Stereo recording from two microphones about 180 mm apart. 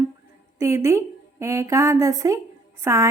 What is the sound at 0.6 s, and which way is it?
A woman's voice, 15° right (ahead or behind).